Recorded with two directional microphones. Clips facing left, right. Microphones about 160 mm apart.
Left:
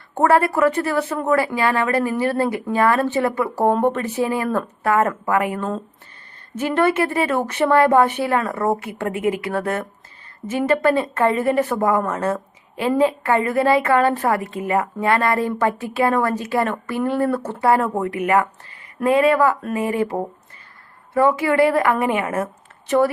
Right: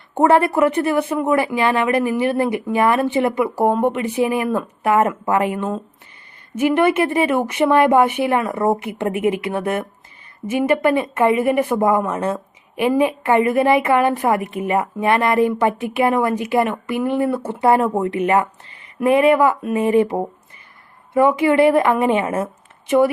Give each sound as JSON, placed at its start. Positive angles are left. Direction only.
{"t": 0.2, "sound": "a woman's voice", "side_deg": -20}